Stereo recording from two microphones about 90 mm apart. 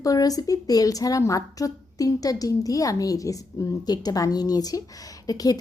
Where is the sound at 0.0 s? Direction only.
40° left (ahead or behind).